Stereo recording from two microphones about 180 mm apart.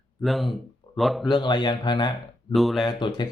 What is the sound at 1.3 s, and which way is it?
Speech, 25° left (ahead or behind).